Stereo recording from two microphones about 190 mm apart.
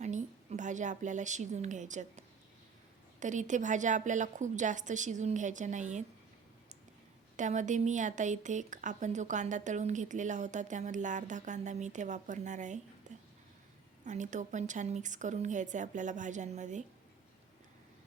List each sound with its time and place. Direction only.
0.0 s a woman's voice: 40° right (ahead or behind)
7.3 s speech: 40° right (ahead or behind)